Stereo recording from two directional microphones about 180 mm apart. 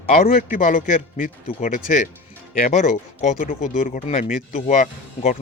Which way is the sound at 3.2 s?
50° left (ahead or behind).